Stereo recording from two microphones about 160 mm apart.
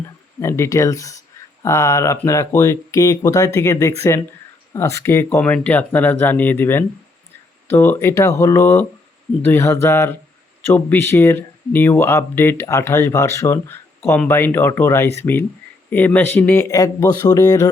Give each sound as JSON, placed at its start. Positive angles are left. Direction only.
{"t": 0.3, "sound": "speech", "side_deg": 15}